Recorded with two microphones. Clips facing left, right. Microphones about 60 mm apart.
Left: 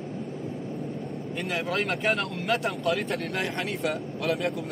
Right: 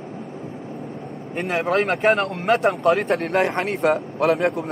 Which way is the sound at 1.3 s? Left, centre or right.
Right.